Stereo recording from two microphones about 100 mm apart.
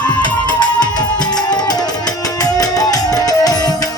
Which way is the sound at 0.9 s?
45° left (ahead or behind).